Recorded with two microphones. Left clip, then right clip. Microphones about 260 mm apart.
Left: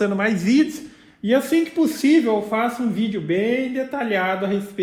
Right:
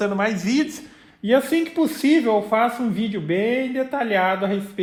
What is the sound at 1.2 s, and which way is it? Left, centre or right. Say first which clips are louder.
Speech: even; right.